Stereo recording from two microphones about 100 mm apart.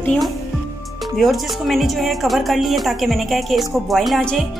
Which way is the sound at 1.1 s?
Centre (ahead or behind).